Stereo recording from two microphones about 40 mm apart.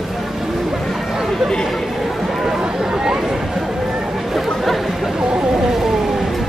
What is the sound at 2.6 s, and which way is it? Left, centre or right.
Chatter, centre.